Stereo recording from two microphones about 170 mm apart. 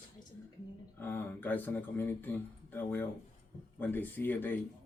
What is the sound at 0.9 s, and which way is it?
Speech, 10° left (ahead or behind).